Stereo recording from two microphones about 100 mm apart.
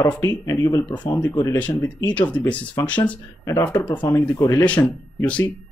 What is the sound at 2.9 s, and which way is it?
Speech, 15° left (ahead or behind).